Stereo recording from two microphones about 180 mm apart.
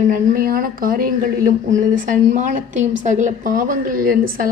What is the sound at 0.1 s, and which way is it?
Speech, 55° right (ahead or behind).